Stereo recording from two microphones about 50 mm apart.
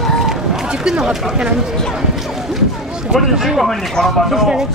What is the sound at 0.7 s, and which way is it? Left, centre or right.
Speech, centre.